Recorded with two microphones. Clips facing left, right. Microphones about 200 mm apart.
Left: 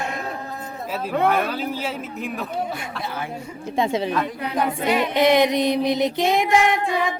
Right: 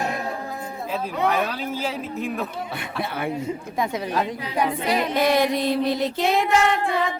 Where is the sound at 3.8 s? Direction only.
25° left (ahead or behind).